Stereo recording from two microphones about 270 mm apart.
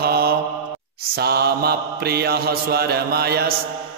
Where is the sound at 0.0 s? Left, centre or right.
Right.